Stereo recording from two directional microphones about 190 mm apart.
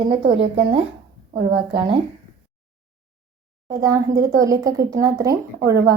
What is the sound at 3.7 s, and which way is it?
Speech, 15° right (ahead or behind).